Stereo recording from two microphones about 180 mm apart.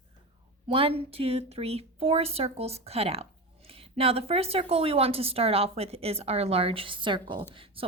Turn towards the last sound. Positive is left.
turn(degrees=-30)  # may be behind; listen again after turning